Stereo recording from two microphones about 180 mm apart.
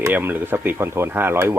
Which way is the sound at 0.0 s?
10° right (ahead or behind).